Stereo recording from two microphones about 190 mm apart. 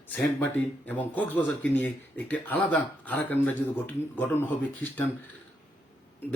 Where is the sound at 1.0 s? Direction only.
10° left (ahead or behind).